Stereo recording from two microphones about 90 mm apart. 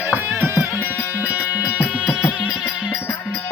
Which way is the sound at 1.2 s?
20° right (ahead or behind).